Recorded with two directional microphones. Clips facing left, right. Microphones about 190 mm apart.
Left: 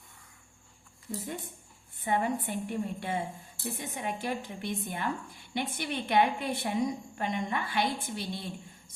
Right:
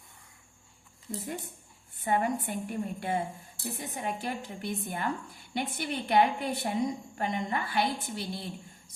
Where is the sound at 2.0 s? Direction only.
45° right (ahead or behind).